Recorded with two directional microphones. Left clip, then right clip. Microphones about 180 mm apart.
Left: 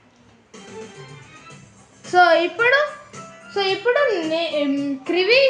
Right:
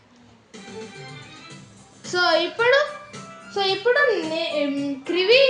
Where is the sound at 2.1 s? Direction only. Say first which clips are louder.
Left 5 dB; 40° left (ahead or behind).